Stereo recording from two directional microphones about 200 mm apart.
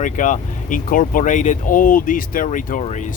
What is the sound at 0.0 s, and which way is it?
Speech, 40° left (ahead or behind).